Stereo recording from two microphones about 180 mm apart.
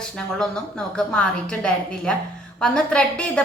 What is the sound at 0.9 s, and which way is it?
A woman's voice, 5° left (ahead or behind).